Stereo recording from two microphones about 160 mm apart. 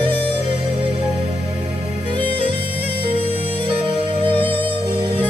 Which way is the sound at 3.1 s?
35° right (ahead or behind).